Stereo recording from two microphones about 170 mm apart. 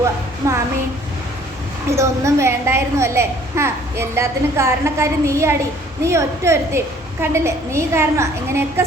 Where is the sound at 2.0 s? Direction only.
15° right (ahead or behind).